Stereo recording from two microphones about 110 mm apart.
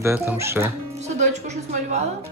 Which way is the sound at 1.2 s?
90° right.